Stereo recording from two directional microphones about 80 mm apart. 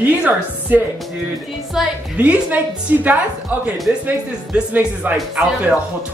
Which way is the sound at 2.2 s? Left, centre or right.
Centre.